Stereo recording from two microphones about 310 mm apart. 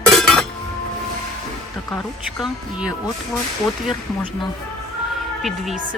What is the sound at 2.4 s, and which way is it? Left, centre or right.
Speech, centre.